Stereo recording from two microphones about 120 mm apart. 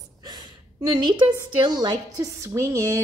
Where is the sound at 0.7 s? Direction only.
35° right (ahead or behind).